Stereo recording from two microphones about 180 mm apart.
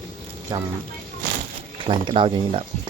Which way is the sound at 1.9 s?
30° right (ahead or behind).